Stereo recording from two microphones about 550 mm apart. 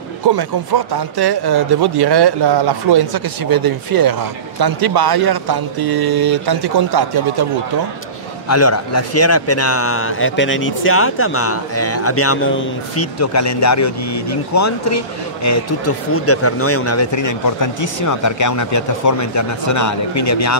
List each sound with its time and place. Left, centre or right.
0.4 s speech: right
8.5 s a man's voice: left